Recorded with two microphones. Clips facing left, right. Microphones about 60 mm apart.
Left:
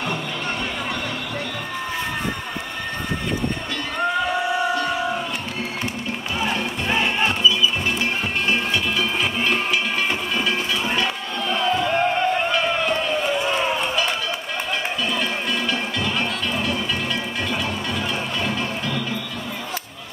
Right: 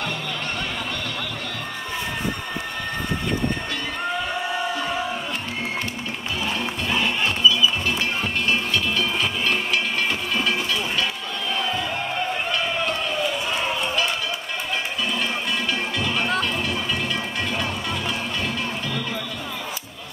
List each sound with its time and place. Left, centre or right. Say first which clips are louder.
6.4 s music: left 3 dB; left
8.5 s music: left 1 dB; centre
11.7 s crowd: left 6 dB; left
15.7 s music: left 1 dB; centre
16.6 s a sound: left 1 dB; centre